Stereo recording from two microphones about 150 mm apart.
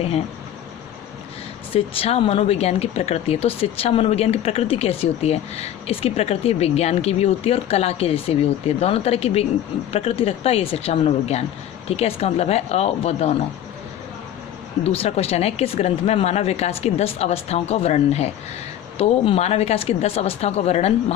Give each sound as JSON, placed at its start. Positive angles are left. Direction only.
{"t": 1.7, "sound": "speech", "side_deg": 40}
{"t": 14.8, "sound": "speech", "side_deg": 45}